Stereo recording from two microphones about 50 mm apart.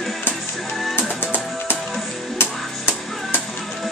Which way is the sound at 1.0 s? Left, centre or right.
Left.